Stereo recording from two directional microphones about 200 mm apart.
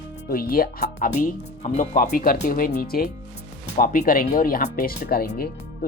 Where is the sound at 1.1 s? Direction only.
35° left (ahead or behind).